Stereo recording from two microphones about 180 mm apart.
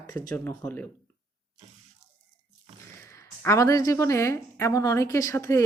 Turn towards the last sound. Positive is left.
turn(degrees=15)  # may be behind; listen again after turning